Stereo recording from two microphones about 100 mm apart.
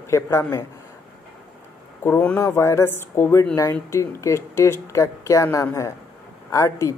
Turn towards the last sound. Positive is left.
turn(degrees=30)  # may be behind; listen again after turning